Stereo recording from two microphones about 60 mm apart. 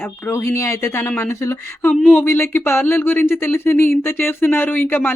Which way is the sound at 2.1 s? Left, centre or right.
Left.